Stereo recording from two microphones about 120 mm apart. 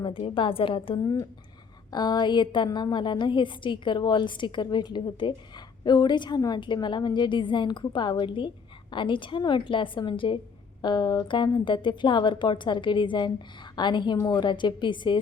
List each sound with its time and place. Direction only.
0.0 s a woman's voice: 45° left (ahead or behind)